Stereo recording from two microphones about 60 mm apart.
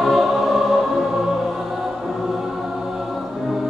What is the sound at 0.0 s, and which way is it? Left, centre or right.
Music, centre.